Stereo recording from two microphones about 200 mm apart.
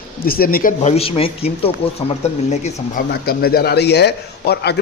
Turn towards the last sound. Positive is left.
turn(degrees=55)  # may be behind; listen again after turning